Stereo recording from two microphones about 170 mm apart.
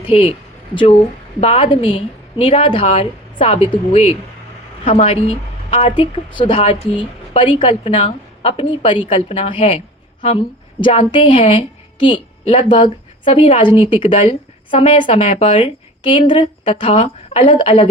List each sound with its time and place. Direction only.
0.0 s a woman's voice: 35° left (ahead or behind)